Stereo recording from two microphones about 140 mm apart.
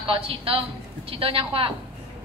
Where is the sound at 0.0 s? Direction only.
40° right (ahead or behind).